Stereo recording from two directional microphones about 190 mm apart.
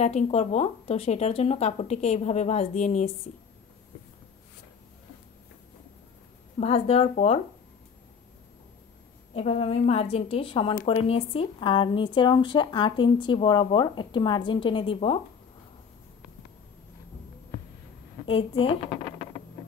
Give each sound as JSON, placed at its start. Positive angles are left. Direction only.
{"t": 0.0, "sound": "speech", "side_deg": 35}
{"t": 6.6, "sound": "speech", "side_deg": 30}
{"t": 9.3, "sound": "speech", "side_deg": 30}
{"t": 18.2, "sound": "speech", "side_deg": 30}